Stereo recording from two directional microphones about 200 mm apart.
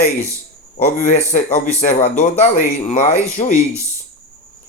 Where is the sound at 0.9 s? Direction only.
40° left (ahead or behind).